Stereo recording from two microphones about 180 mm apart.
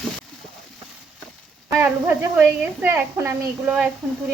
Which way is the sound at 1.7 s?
10° right (ahead or behind).